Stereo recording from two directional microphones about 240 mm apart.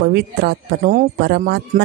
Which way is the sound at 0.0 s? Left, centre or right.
Right.